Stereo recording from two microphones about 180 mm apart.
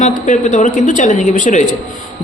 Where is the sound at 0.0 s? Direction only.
45° left (ahead or behind).